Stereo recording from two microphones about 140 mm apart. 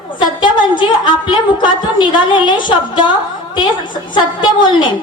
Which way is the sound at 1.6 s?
35° left (ahead or behind).